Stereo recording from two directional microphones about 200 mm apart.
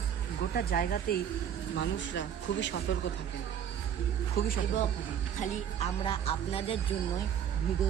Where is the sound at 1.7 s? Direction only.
65° left (ahead or behind).